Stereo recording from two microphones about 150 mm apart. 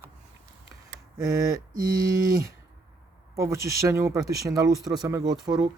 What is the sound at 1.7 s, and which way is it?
Mantra, 80° right.